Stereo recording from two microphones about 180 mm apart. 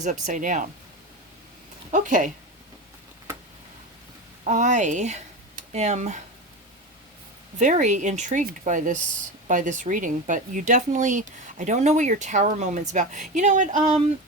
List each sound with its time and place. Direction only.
0.0 s speech: 40° right (ahead or behind)
1.9 s speech: 45° right (ahead or behind)
4.4 s speech: 45° right (ahead or behind)
7.6 s speech: 40° right (ahead or behind)